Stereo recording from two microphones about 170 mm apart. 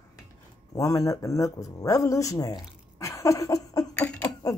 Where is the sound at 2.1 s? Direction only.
20° left (ahead or behind).